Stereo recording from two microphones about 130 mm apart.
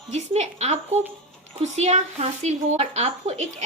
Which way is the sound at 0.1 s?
60° right (ahead or behind).